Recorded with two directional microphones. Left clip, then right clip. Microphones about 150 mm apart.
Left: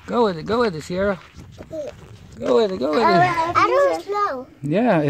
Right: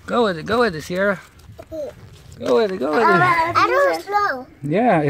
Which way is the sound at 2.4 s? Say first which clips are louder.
Even; 20° left (ahead or behind).